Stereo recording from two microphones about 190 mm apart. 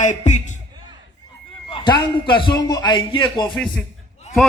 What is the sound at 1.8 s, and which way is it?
A man's voice, 25° left (ahead or behind).